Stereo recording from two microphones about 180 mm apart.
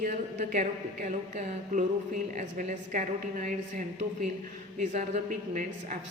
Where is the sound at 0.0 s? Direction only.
45° right (ahead or behind).